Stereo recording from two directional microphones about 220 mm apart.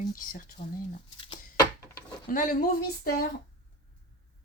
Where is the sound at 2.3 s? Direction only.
40° left (ahead or behind).